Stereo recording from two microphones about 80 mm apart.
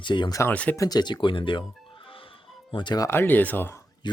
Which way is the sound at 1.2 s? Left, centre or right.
Left.